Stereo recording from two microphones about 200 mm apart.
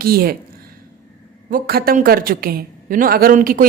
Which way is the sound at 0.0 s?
50° right (ahead or behind).